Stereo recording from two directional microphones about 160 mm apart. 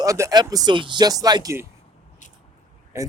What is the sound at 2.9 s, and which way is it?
Speech, 20° right (ahead or behind).